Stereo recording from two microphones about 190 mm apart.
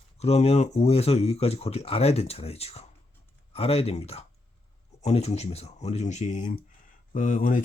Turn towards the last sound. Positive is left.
turn(degrees=45)  # may be behind; listen again after turning